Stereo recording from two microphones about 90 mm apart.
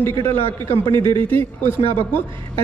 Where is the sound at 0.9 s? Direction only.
65° right (ahead or behind).